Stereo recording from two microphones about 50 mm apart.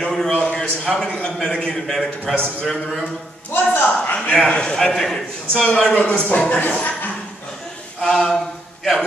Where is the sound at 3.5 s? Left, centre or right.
Left.